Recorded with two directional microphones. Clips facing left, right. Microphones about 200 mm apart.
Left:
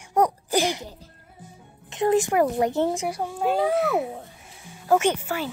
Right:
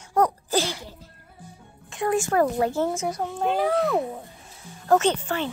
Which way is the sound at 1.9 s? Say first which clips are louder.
Left 3 dB; 20° left (ahead or behind).